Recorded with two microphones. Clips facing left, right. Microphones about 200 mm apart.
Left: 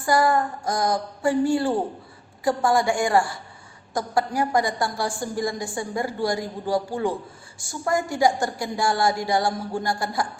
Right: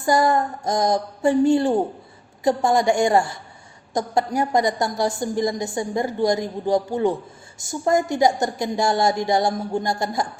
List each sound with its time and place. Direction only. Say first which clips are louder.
0.0 s a woman's voice: right 2 dB; 20° right (ahead or behind)